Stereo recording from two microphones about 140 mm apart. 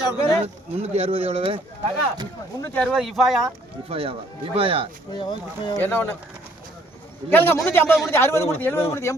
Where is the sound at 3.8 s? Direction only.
45° right (ahead or behind).